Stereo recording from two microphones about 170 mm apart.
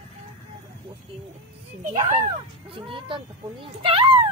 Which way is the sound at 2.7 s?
30° right (ahead or behind).